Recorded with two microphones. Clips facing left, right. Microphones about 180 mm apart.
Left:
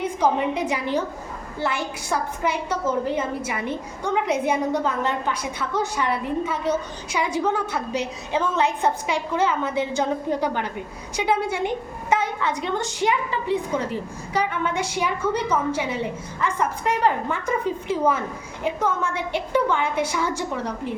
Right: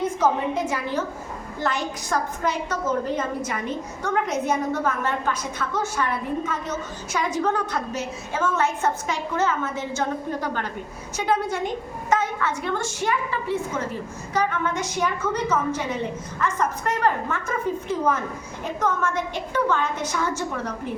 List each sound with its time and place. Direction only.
0.0 s a woman's voice: 15° left (ahead or behind)